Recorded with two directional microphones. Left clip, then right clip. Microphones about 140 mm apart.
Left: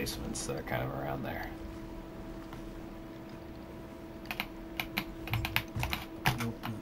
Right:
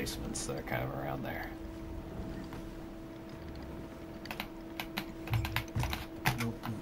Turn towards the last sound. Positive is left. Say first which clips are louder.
# left 2 dB
turn(degrees=20)  # may be behind; listen again after turning